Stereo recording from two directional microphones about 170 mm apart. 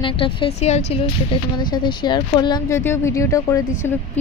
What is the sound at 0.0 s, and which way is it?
A woman's voice, 30° left (ahead or behind).